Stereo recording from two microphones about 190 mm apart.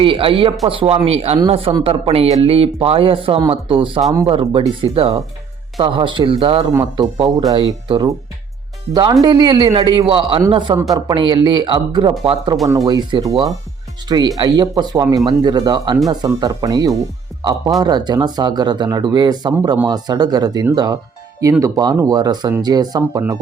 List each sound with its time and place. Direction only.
0.0 s speech: 30° right (ahead or behind)